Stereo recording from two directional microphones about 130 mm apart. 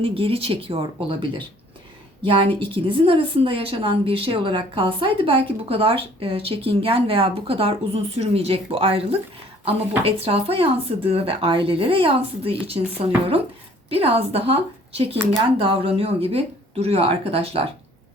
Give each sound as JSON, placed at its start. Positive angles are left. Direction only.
{"t": 0.0, "sound": "a woman's voice", "side_deg": -45}
{"t": 13.9, "sound": "a woman's voice", "side_deg": -50}